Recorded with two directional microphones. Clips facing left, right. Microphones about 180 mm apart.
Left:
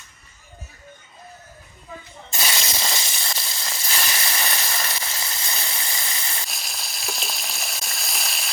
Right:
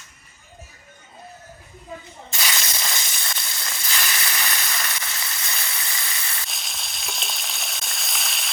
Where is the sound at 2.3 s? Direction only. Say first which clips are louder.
Left 2 dB; 30° left (ahead or behind).